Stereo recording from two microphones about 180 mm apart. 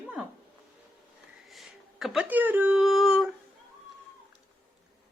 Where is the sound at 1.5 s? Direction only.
Centre (ahead or behind).